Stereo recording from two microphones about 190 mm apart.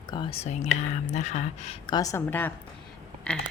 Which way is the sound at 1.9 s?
15° left (ahead or behind).